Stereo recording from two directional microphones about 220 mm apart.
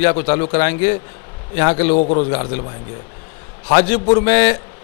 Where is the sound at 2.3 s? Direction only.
15° left (ahead or behind).